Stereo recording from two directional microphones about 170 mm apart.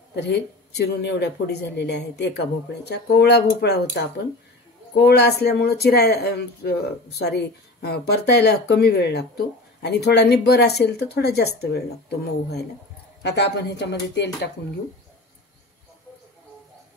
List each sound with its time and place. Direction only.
0.1 s speech: 80° left
13.2 s speech: 85° left